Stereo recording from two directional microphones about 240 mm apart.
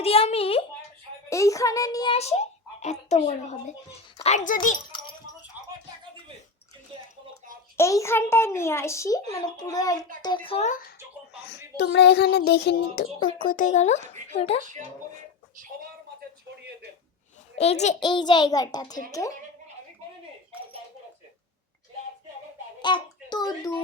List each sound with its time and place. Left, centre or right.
0.0 s a child's voice: left
1.3 s a child's voice: centre; by 4.8 s left
7.8 s a child's voice: centre
11.8 s a child's voice: left
17.6 s a child's voice: left
22.8 s a sound: centre